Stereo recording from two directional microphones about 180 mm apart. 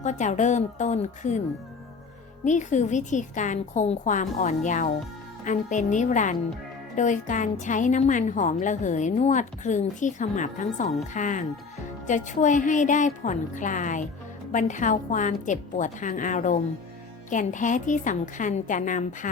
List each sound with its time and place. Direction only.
0.0 s a woman's voice: 40° left (ahead or behind)
2.4 s a woman's voice: 40° left (ahead or behind)